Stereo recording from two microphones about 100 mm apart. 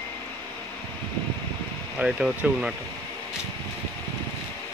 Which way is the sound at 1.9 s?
10° right (ahead or behind).